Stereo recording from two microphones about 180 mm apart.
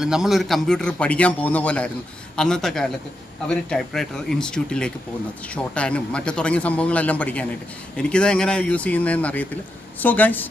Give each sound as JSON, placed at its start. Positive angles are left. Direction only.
{"t": 0.0, "sound": "a man's voice", "side_deg": 0}